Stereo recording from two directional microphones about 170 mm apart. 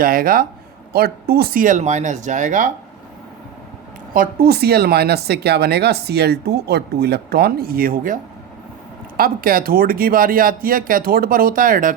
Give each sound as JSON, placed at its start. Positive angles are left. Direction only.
{"t": 0.0, "sound": "speech", "side_deg": -60}
{"t": 4.1, "sound": "speech", "side_deg": -60}